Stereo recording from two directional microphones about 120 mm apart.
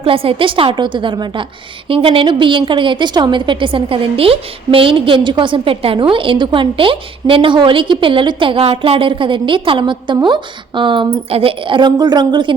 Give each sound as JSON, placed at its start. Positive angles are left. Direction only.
{"t": 0.0, "sound": "a woman's voice", "side_deg": -50}